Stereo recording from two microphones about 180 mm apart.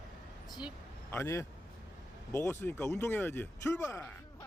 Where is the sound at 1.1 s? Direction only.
15° left (ahead or behind).